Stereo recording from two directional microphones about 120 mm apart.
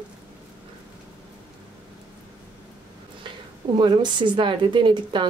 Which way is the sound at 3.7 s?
40° right (ahead or behind).